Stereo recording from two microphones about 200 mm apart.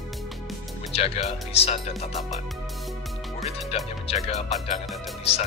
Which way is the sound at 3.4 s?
30° left (ahead or behind).